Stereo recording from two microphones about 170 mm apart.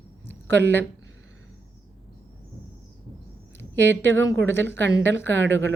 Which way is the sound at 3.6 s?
90° right.